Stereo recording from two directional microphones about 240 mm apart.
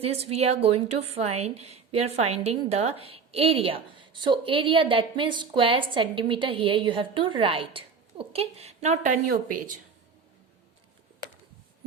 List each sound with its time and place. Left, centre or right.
0.0 s a woman's voice: right